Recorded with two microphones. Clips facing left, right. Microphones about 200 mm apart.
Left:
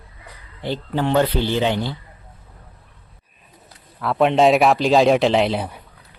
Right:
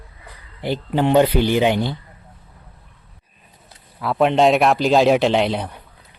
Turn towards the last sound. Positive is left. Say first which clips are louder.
# even
turn(degrees=5)  # may be behind; listen again after turning